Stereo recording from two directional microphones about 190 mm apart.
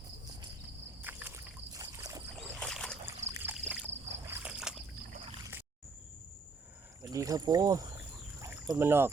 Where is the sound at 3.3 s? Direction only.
10° right (ahead or behind).